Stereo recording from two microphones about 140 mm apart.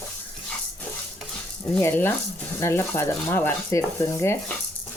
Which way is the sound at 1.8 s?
15° left (ahead or behind).